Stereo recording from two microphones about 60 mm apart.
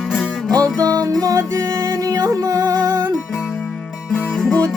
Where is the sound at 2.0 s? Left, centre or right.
Right.